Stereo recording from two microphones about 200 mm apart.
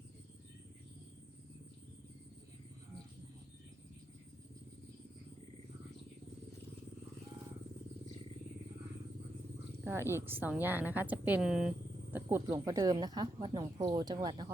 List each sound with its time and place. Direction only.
9.8 s a woman's voice: 10° right (ahead or behind)
12.5 s speech: 15° right (ahead or behind)